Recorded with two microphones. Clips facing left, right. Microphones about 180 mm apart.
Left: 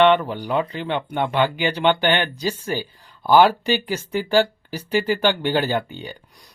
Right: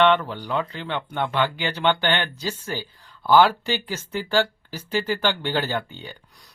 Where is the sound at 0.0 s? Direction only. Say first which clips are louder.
Left 3 dB; 15° left (ahead or behind).